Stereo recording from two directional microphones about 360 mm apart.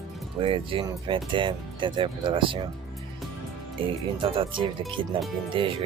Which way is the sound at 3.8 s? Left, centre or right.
Centre.